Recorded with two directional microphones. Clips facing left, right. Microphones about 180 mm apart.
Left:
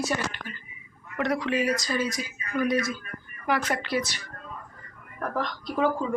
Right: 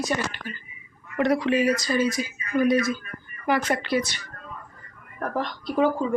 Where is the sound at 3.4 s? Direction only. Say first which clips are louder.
Right 3 dB; centre (ahead or behind).